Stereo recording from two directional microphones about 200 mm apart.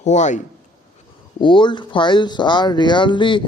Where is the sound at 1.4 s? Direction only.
25° left (ahead or behind).